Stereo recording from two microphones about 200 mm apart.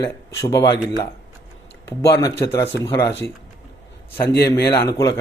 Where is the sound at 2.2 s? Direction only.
15° left (ahead or behind).